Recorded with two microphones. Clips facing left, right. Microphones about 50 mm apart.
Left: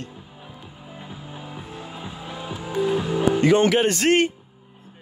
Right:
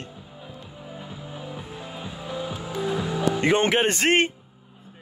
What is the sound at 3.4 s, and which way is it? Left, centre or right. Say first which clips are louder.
Speech: left 3 dB; right.